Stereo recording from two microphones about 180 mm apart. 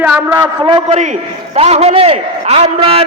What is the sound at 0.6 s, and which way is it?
A man's voice, 30° right (ahead or behind).